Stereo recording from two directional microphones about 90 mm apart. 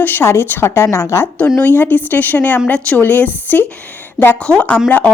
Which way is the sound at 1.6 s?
20° left (ahead or behind).